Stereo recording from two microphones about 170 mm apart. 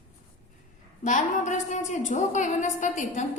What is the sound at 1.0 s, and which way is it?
A woman's voice, 45° left (ahead or behind).